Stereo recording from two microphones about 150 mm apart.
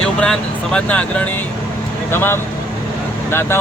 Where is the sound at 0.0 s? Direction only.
5° left (ahead or behind).